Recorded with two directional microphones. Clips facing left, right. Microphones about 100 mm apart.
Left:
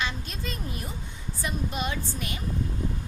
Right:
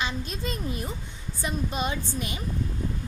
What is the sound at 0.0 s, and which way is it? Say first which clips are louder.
Speech: right 2 dB; 20° right (ahead or behind).